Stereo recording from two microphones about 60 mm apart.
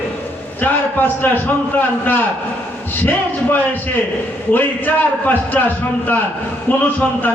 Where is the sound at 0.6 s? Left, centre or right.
Left.